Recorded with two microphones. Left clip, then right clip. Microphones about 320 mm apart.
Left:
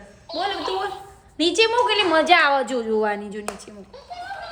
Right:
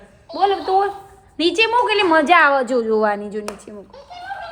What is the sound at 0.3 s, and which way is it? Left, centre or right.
Music, centre.